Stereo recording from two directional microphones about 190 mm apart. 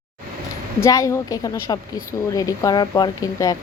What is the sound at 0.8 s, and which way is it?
A woman's voice, 15° left (ahead or behind).